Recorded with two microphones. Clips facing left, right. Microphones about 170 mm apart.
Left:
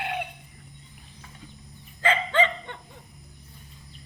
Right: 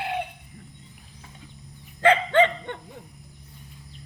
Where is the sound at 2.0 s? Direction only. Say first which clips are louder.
Right 5 dB; 60° right (ahead or behind).